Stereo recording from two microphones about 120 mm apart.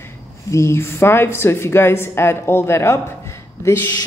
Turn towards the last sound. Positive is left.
turn(degrees=20)  # may be behind; listen again after turning